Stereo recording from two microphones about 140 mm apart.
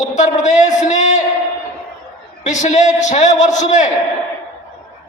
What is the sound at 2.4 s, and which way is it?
A man's voice, 60° left (ahead or behind).